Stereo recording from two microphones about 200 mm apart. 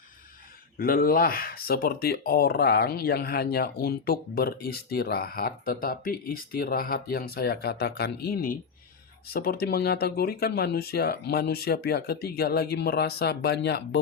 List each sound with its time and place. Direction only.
0.8 s speech: 45° left (ahead or behind)